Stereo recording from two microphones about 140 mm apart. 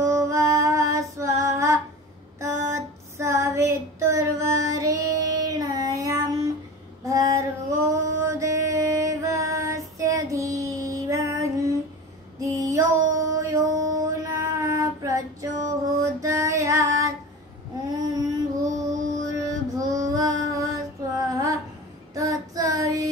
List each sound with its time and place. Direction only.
0.0 s female singing: 20° right (ahead or behind)
2.4 s child singing: 20° right (ahead or behind)
7.1 s music: 25° right (ahead or behind)
12.4 s mantra: 20° right (ahead or behind)
16.0 s music: 20° right (ahead or behind)
18.0 s a sound: 25° right (ahead or behind)
19.4 s music: 25° right (ahead or behind)
21.3 s a sound: 25° right (ahead or behind)
22.1 s child singing: 25° right (ahead or behind)